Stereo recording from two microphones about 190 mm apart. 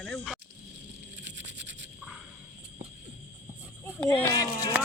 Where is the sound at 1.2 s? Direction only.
70° right (ahead or behind).